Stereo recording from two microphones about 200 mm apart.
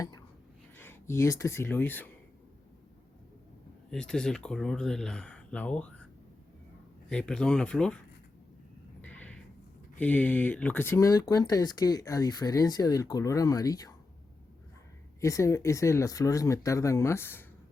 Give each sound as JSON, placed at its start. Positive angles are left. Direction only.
{"t": 0.8, "sound": "speech", "side_deg": 10}
{"t": 3.9, "sound": "speech", "side_deg": 5}
{"t": 7.1, "sound": "speech", "side_deg": 5}
{"t": 9.0, "sound": "a sound", "side_deg": 5}
{"t": 10.0, "sound": "speech", "side_deg": 5}
{"t": 15.2, "sound": "speech", "side_deg": 15}